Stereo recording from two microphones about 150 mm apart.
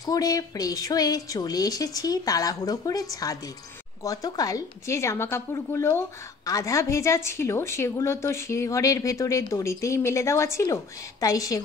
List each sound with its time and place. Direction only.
0.0 s a woman's voice: 25° left (ahead or behind)